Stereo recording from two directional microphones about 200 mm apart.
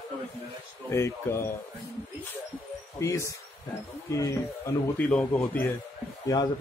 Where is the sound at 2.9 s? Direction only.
15° left (ahead or behind).